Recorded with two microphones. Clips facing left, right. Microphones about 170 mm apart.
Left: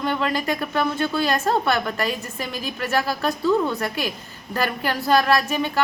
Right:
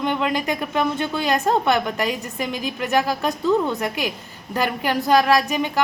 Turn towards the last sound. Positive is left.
turn(degrees=-15)  # may be behind; listen again after turning